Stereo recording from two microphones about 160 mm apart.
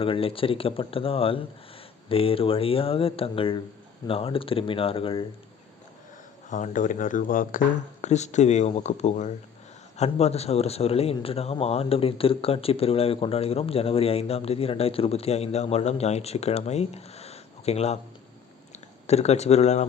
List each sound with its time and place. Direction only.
0.0 s speech: 35° left (ahead or behind)
6.5 s speech: 50° left (ahead or behind)
19.0 s speech: 40° left (ahead or behind)